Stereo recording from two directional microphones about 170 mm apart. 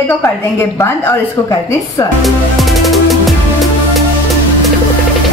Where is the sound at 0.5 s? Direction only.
15° left (ahead or behind).